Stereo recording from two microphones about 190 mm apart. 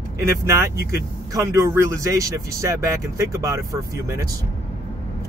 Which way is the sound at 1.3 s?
20° right (ahead or behind).